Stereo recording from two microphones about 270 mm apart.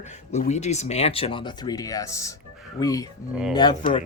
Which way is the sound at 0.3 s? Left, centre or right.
Left.